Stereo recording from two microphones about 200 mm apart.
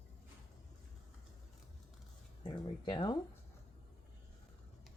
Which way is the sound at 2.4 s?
25° left (ahead or behind).